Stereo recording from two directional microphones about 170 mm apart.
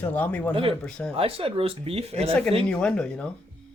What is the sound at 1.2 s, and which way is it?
Speech, 35° right (ahead or behind).